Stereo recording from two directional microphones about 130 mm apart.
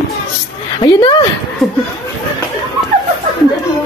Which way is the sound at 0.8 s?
35° left (ahead or behind).